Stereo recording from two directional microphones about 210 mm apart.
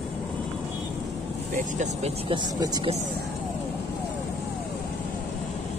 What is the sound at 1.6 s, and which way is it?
Speech, 35° right (ahead or behind).